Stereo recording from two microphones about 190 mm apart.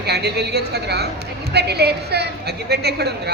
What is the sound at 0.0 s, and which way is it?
A woman's voice, 60° right (ahead or behind).